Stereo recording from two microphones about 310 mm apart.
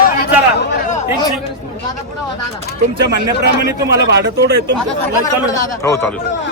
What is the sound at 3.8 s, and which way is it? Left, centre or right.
Speech, right.